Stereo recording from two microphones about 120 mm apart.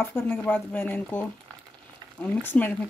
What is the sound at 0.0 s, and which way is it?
Speech, 15° left (ahead or behind).